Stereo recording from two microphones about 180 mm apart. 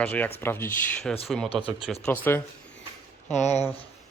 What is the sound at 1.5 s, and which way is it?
Speech, centre (ahead or behind).